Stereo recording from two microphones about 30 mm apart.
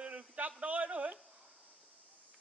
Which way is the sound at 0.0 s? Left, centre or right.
Right.